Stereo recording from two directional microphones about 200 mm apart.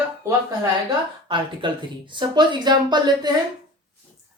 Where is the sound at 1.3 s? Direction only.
25° right (ahead or behind).